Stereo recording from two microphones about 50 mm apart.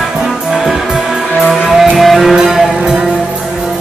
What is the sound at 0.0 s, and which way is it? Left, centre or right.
Music, centre.